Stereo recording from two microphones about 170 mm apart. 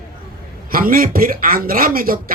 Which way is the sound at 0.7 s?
60° right (ahead or behind).